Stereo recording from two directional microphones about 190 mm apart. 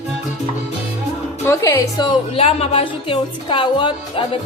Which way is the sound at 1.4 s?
15° left (ahead or behind).